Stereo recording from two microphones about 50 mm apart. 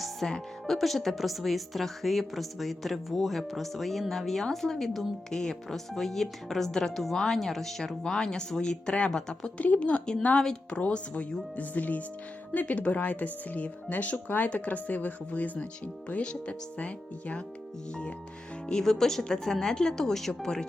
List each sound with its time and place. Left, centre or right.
0.2 s speech: centre
0.7 s a woman's voice: centre
9.6 s speech: left
18.6 s speech: centre